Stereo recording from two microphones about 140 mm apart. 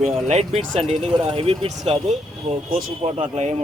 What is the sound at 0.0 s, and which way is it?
Speech, 50° right (ahead or behind).